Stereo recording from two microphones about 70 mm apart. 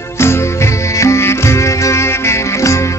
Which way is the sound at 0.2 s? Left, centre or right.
Left.